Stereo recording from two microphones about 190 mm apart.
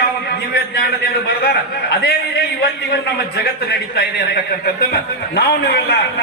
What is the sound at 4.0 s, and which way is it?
Speech, 55° left (ahead or behind).